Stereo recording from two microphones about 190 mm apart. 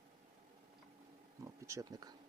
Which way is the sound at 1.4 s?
15° right (ahead or behind).